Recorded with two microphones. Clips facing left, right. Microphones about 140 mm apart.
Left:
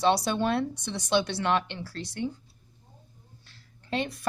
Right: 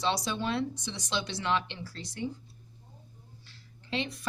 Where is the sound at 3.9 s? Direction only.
50° left (ahead or behind).